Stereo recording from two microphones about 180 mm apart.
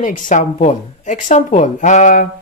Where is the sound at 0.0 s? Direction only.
45° left (ahead or behind).